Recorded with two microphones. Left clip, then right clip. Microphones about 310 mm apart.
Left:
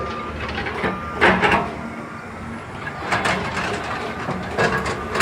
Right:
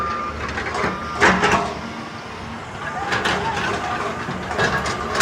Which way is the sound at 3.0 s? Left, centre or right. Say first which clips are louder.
Even; left.